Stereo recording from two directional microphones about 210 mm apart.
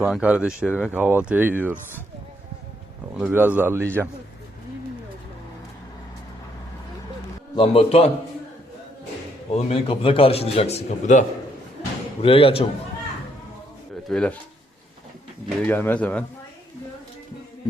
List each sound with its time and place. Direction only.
0.0 s speech: 5° right (ahead or behind)
3.2 s speech: 5° right (ahead or behind)
7.5 s a man's voice: 25° left (ahead or behind)
9.6 s a man's voice: 30° left (ahead or behind)
14.1 s speech: 5° left (ahead or behind)
15.6 s speech: 10° left (ahead or behind)